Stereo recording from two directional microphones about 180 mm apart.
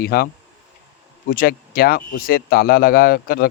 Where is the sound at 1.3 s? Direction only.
55° left (ahead or behind).